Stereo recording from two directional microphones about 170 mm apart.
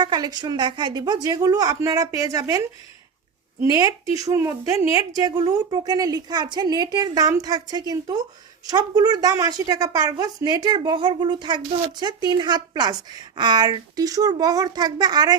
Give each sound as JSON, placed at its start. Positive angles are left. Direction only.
{"t": 0.0, "sound": "a woman's voice", "side_deg": -25}
{"t": 3.8, "sound": "a woman's voice", "side_deg": -20}